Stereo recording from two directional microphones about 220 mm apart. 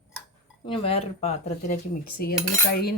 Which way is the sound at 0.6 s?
25° left (ahead or behind).